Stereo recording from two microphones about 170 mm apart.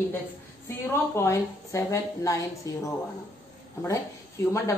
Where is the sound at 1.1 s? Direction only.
15° left (ahead or behind).